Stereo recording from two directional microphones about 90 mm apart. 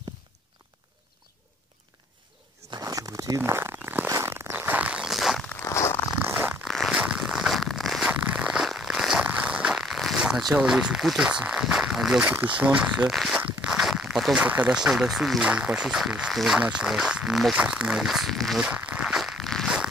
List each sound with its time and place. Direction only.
2.8 s a sound: 40° right (ahead or behind); by 5.4 s 5° right (ahead or behind)
5.6 s zipper: 30° left (ahead or behind)
6.2 s zipper: 20° right (ahead or behind)
6.6 s zipper: centre (ahead or behind)
8.1 s zipper: 15° right (ahead or behind)
9.2 s a sound: 10° right (ahead or behind)
10.7 s speech: 5° right (ahead or behind)
12.3 s speech: 15° right (ahead or behind)
13.1 s speech: centre (ahead or behind)
13.7 s zipper: 5° right (ahead or behind)
14.5 s speech: 15° right (ahead or behind)
18.6 s zipper: 10° right (ahead or behind)